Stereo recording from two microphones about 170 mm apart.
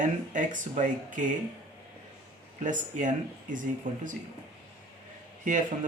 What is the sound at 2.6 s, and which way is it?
Speech, 50° right (ahead or behind).